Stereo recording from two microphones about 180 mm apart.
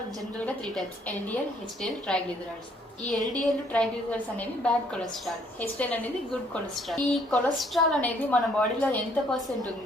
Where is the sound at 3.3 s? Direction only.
5° left (ahead or behind).